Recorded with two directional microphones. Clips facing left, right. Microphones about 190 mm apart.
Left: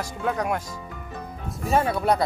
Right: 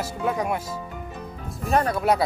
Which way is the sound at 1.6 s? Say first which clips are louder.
Even; centre (ahead or behind).